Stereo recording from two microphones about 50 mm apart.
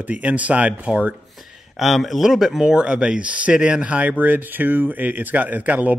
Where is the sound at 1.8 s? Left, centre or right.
Centre.